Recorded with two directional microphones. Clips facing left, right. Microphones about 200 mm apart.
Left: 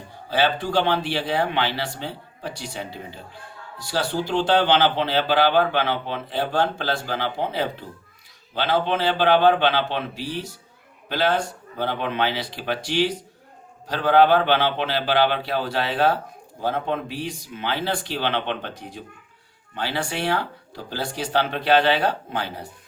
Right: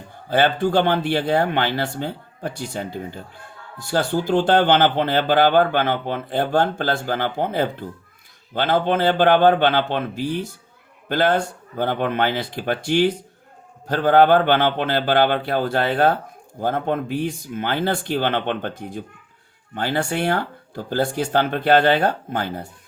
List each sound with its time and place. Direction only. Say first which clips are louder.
0.3 s speech: right 4 dB; 50° right (ahead or behind)